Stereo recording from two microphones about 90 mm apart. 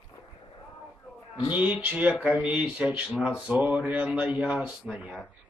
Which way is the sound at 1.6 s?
15° right (ahead or behind).